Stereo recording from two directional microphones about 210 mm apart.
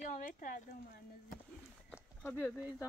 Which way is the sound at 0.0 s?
40° left (ahead or behind).